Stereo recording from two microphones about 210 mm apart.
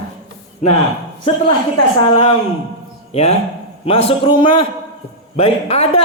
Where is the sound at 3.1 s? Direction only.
30° left (ahead or behind).